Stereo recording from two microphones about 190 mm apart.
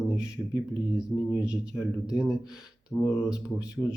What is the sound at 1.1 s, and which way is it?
Speech, 10° left (ahead or behind).